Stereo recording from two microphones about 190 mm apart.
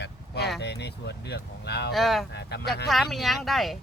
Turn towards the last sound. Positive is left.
turn(degrees=0)  # may be behind; listen again after turning